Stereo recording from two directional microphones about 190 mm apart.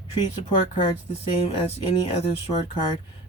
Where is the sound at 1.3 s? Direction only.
30° left (ahead or behind).